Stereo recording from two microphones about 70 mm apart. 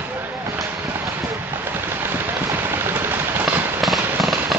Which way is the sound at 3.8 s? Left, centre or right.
Centre.